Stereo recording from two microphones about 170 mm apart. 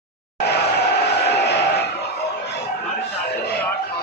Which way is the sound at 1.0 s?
75° left (ahead or behind).